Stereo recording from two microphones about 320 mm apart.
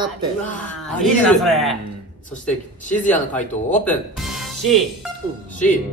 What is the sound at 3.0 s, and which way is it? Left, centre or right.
Speech, centre.